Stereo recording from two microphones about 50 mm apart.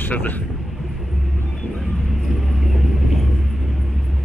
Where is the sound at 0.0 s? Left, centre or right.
Left.